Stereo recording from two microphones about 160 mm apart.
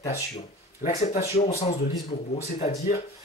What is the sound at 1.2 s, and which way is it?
Speech, 40° left (ahead or behind).